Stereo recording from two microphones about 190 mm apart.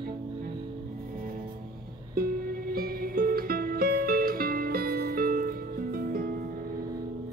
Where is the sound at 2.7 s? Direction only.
50° right (ahead or behind).